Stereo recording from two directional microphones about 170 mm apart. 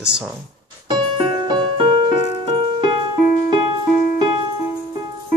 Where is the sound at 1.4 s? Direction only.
30° right (ahead or behind).